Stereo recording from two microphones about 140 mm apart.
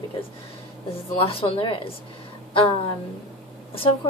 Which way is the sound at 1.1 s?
40° left (ahead or behind).